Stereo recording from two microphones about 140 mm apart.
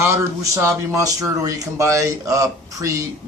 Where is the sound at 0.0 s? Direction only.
20° right (ahead or behind).